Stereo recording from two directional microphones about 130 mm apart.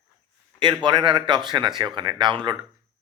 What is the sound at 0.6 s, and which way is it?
A man's voice, 35° right (ahead or behind).